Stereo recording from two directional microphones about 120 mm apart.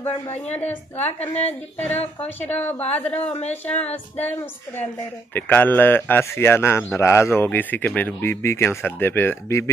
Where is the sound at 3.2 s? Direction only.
65° left (ahead or behind).